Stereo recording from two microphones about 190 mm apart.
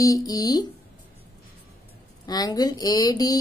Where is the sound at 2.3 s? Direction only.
20° left (ahead or behind).